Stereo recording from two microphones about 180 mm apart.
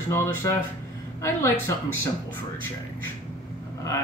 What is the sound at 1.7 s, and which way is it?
Speech, 20° left (ahead or behind).